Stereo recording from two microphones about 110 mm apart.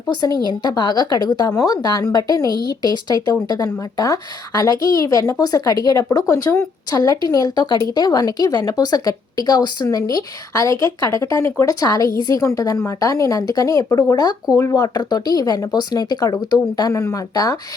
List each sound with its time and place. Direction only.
0.2 s speech: 35° left (ahead or behind)